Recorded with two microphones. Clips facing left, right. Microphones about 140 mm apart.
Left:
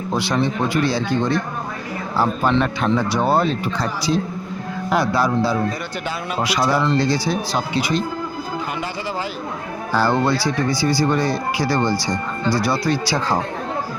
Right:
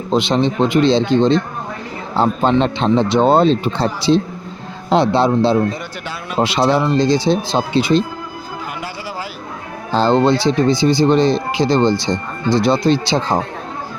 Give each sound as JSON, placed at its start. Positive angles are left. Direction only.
{"t": 0.1, "sound": "speech", "side_deg": -20}
{"t": 9.9, "sound": "speech", "side_deg": -20}